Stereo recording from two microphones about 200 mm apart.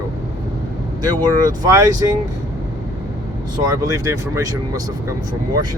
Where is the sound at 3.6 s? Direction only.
20° right (ahead or behind).